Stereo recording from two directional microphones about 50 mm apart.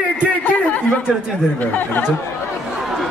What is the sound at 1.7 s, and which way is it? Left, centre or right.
Speech, left.